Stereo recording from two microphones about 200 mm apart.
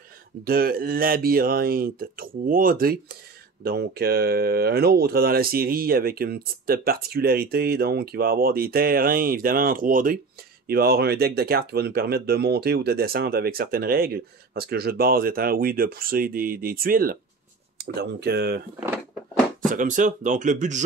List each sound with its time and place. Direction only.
0.4 s speech: 50° right (ahead or behind)
19.7 s speech: 40° right (ahead or behind)